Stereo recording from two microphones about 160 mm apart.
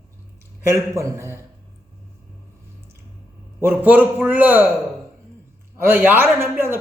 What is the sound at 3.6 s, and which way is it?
A man's voice, 10° right (ahead or behind).